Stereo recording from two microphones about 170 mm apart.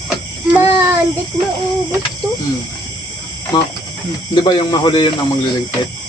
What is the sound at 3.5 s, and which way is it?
Speech, 25° left (ahead or behind).